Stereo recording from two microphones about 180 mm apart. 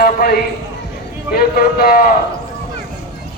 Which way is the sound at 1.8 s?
55° left (ahead or behind).